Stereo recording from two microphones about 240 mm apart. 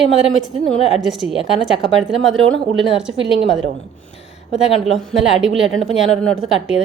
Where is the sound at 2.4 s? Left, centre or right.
Right.